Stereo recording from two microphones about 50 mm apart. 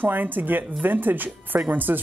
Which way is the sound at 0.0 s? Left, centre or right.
Right.